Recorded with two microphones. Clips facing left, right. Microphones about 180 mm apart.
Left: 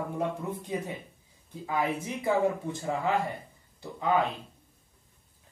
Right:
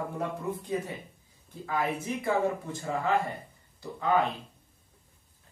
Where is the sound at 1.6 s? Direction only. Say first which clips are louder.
Left 1 dB; 15° left (ahead or behind).